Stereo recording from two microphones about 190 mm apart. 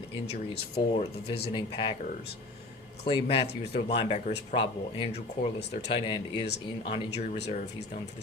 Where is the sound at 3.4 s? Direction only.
60° left (ahead or behind).